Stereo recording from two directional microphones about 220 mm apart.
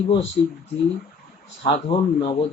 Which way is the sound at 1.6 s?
25° left (ahead or behind).